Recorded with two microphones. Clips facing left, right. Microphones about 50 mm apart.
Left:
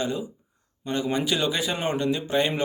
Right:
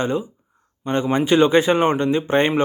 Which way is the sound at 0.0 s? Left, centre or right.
Right.